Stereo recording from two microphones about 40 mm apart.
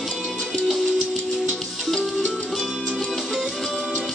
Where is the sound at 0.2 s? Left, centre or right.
Centre.